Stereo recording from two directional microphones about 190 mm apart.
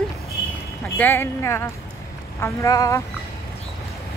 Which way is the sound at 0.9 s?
10° left (ahead or behind).